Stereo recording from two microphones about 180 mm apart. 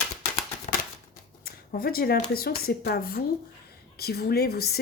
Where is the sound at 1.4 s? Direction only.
55° left (ahead or behind).